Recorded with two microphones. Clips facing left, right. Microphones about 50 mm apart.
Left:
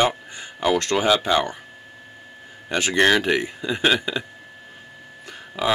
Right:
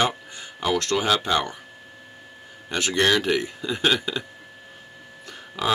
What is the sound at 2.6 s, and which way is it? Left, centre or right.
Speech, centre.